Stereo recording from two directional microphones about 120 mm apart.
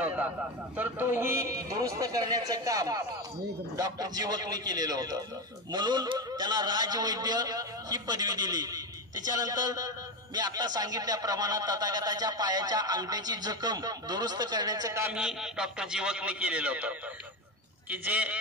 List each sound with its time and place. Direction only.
0.0 s a man's voice: 15° right (ahead or behind); by 15.0 s 30° right (ahead or behind)
15.0 s a man's voice: 5° right (ahead or behind)